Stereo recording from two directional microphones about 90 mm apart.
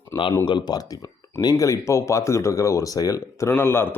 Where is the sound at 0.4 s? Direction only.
55° left (ahead or behind).